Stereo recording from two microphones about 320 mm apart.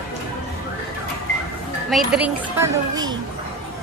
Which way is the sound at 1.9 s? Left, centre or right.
Centre.